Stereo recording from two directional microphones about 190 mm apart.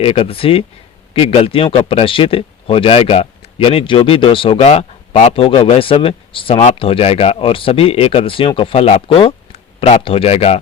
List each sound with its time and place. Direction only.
0.0 s speech: 30° left (ahead or behind)